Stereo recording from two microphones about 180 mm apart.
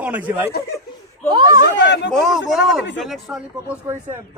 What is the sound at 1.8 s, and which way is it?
Speech, 75° left (ahead or behind).